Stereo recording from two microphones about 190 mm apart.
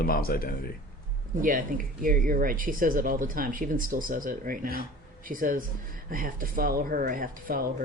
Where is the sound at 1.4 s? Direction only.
45° right (ahead or behind).